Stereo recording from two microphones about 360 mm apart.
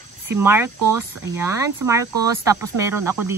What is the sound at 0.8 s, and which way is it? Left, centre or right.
Speech, right.